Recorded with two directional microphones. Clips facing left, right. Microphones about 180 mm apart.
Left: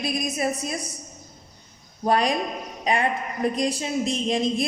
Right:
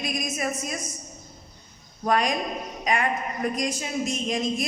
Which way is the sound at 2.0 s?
30° left (ahead or behind).